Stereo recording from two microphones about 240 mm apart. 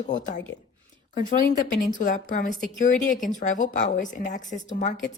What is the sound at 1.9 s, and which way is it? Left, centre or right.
A woman's voice, left.